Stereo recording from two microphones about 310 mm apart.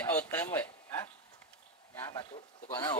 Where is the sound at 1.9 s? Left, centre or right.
Centre.